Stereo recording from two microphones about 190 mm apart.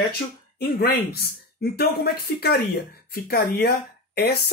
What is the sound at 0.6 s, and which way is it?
Speech, 55° left (ahead or behind).